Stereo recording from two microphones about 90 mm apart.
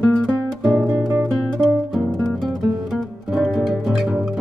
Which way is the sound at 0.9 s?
40° right (ahead or behind).